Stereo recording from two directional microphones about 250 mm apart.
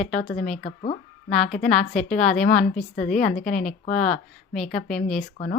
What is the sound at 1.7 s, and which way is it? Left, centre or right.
Speech, centre.